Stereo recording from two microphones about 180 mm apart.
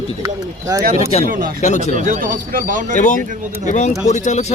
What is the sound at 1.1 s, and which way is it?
Speech, 35° left (ahead or behind).